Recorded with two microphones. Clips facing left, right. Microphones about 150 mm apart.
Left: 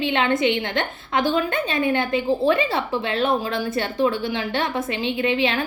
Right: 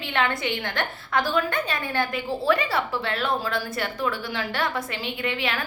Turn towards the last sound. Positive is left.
turn(degrees=25)  # may be behind; listen again after turning